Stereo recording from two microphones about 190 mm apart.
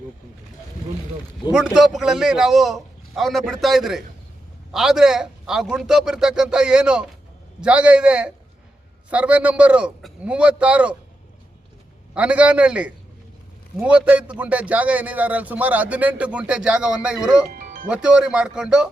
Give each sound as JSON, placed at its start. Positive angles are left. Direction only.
{"t": 1.5, "sound": "a man's voice", "side_deg": 0}
{"t": 12.1, "sound": "a man's voice", "side_deg": -5}
{"t": 17.5, "sound": "music", "side_deg": -45}
{"t": 17.8, "sound": "a man's voice", "side_deg": -5}